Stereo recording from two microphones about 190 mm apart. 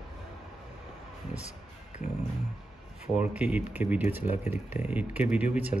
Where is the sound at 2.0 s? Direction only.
35° left (ahead or behind).